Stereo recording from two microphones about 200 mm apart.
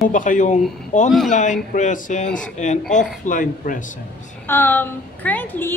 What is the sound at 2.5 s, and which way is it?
Speech, 35° left (ahead or behind).